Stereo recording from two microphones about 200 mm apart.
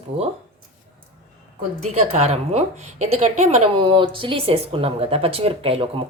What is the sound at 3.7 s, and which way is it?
Speech, 25° right (ahead or behind).